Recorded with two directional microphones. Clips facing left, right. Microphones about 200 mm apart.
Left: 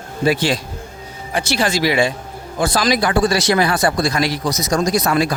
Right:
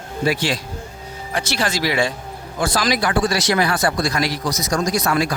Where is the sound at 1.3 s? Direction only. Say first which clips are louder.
Left 4 dB; 10° left (ahead or behind).